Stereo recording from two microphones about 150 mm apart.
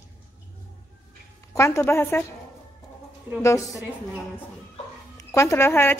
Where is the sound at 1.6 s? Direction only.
15° left (ahead or behind).